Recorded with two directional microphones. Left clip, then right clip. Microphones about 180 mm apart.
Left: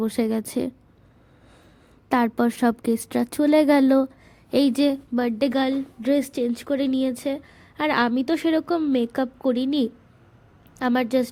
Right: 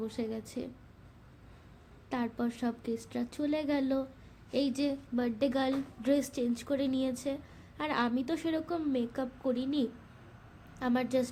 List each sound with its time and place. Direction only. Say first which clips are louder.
0.0 s a woman's voice: left 13 dB; 45° left (ahead or behind)
2.0 s a woman's voice: left 14 dB; 45° left (ahead or behind)